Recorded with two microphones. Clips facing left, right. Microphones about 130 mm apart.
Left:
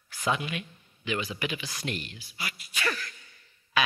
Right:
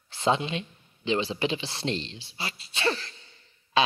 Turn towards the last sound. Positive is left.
turn(degrees=-25)  # may be behind; listen again after turning